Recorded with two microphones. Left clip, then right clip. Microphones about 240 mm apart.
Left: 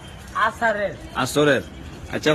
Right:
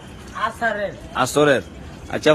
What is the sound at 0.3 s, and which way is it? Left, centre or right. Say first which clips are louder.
Speech: left 2 dB; centre.